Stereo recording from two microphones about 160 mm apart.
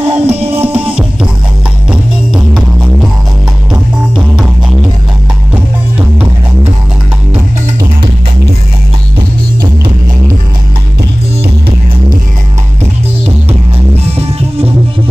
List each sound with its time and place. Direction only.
0.0 s music: 10° right (ahead or behind)
5.5 s music: 10° right (ahead or behind)